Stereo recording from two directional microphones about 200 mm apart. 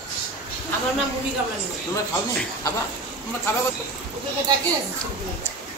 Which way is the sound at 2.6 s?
15° left (ahead or behind).